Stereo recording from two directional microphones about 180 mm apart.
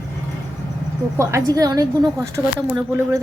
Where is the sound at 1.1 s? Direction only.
20° right (ahead or behind).